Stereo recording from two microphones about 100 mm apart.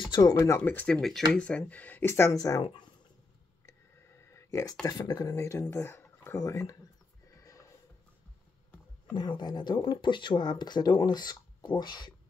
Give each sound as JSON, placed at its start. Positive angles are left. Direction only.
{"t": 0.1, "sound": "speech", "side_deg": 40}
{"t": 0.4, "sound": "speech", "side_deg": 25}
{"t": 2.3, "sound": "speech", "side_deg": 35}
{"t": 4.2, "sound": "a sound", "side_deg": 30}
{"t": 4.8, "sound": "speech", "side_deg": 40}
{"t": 5.3, "sound": "speech", "side_deg": 30}
{"t": 7.3, "sound": "music", "side_deg": 35}
{"t": 9.1, "sound": "speech", "side_deg": 45}